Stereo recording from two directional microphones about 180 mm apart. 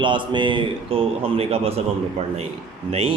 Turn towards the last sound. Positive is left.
turn(degrees=-30)  # may be behind; listen again after turning